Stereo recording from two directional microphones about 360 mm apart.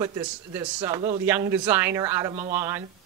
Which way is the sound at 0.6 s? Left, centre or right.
Centre.